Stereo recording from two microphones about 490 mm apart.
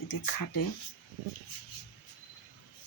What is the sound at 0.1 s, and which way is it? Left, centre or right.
Speech, left.